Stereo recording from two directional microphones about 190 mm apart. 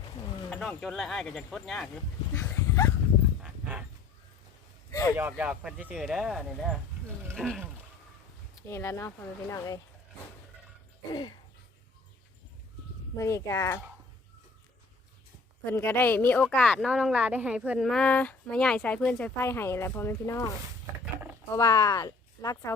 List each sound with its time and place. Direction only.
0.2 s a sound: 25° left (ahead or behind)
0.5 s speech: 5° left (ahead or behind)
2.3 s dog: 15° left (ahead or behind)
3.4 s dog: 5° right (ahead or behind)
4.9 s a sound: 15° left (ahead or behind)
5.1 s speech: 10° right (ahead or behind)
8.6 s a woman's voice: 15° left (ahead or behind)
11.1 s a sound: 25° left (ahead or behind)
13.1 s a woman's voice: 15° left (ahead or behind)
15.6 s a woman's voice: 10° left (ahead or behind)
21.5 s speech: 15° left (ahead or behind)